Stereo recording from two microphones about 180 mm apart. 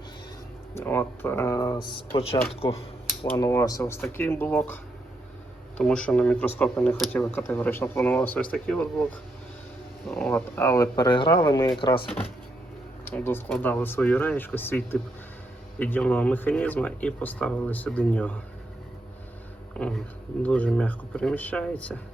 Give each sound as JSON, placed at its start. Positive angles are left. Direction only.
{"t": 0.7, "sound": "speech", "side_deg": 10}
{"t": 2.1, "sound": "speech", "side_deg": 30}
{"t": 3.3, "sound": "speech", "side_deg": 15}
{"t": 11.1, "sound": "speech", "side_deg": 25}
{"t": 13.1, "sound": "speech", "side_deg": 10}
{"t": 19.7, "sound": "speech", "side_deg": 5}